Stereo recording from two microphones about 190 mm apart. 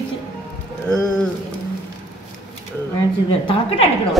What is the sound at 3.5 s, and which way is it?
Speech, 30° left (ahead or behind).